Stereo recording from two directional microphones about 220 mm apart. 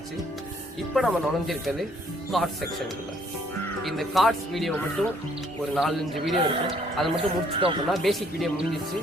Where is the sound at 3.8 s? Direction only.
Centre (ahead or behind).